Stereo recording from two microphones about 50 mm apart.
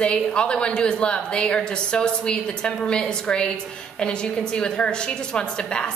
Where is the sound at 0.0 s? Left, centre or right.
Left.